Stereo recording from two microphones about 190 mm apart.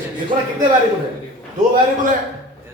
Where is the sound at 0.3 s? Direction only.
40° right (ahead or behind).